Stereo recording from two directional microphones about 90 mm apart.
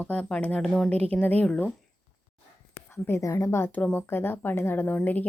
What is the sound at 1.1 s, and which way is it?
Speech, 20° left (ahead or behind).